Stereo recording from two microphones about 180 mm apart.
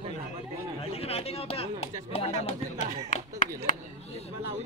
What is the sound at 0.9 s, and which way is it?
Speech, 35° left (ahead or behind).